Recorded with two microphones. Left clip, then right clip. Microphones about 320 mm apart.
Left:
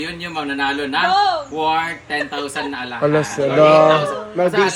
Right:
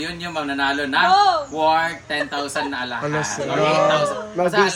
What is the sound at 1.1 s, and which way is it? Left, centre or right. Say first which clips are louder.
Speech: right 1 dB; right.